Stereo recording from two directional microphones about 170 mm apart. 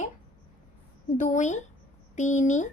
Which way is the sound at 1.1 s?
45° left (ahead or behind).